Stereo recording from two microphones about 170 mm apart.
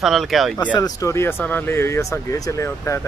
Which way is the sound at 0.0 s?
Centre (ahead or behind).